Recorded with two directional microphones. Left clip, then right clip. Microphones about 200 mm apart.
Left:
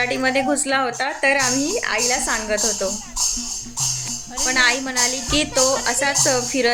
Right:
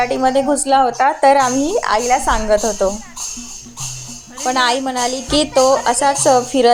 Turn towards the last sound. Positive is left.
turn(degrees=-15)  # may be behind; listen again after turning